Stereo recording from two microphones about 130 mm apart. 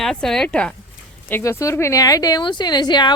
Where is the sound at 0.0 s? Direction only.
5° left (ahead or behind).